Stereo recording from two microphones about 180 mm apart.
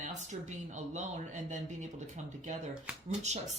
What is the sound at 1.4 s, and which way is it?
Speech, 40° right (ahead or behind).